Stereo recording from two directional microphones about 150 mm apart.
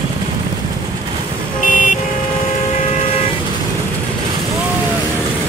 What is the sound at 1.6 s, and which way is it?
Vehicle, 60° left (ahead or behind).